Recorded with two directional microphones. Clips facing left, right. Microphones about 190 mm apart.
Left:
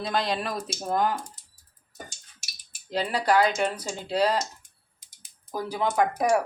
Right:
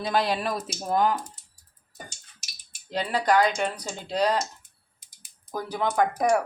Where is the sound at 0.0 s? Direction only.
5° right (ahead or behind).